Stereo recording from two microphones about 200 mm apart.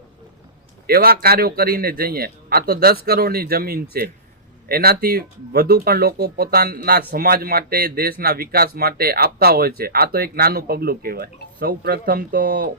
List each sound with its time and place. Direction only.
0.9 s speech: 50° right (ahead or behind)